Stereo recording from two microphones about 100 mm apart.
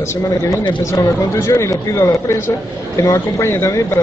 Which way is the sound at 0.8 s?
30° left (ahead or behind).